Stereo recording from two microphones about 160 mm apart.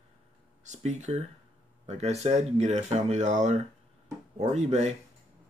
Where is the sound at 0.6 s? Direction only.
50° right (ahead or behind).